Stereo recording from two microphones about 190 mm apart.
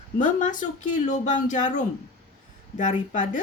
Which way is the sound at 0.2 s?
40° left (ahead or behind).